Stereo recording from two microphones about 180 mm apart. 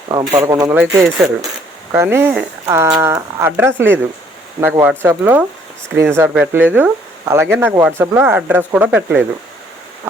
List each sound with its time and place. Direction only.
0.1 s speech: 25° right (ahead or behind); by 9.2 s 10° right (ahead or behind)